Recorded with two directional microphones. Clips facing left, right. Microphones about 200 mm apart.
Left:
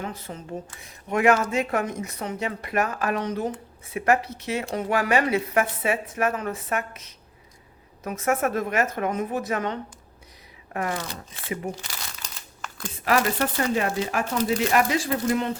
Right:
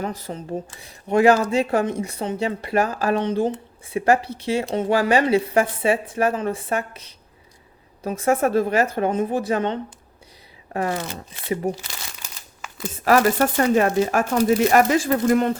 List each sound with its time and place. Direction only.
0.0 s speech: 40° right (ahead or behind)
12.2 s crumpling: 5° right (ahead or behind)
13.1 s speech: 45° right (ahead or behind)